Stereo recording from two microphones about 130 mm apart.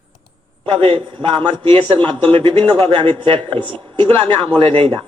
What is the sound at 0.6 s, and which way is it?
A man's voice, 40° right (ahead or behind).